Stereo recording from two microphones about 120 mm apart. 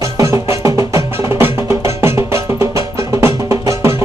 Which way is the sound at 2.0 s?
20° right (ahead or behind).